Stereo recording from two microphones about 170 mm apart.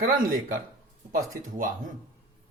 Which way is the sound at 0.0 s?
60° right (ahead or behind).